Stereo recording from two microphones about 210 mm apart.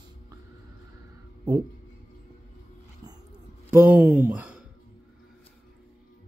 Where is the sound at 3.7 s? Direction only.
10° right (ahead or behind).